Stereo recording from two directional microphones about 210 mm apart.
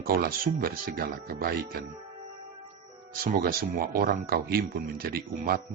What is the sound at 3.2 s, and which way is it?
Speech, 45° right (ahead or behind).